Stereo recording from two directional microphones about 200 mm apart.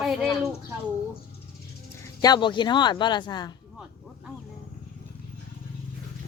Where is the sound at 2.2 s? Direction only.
20° left (ahead or behind).